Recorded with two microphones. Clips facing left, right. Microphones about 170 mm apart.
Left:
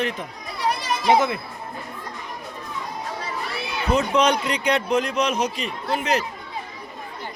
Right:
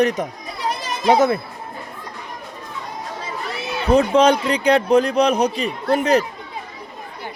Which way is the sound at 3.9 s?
30° right (ahead or behind).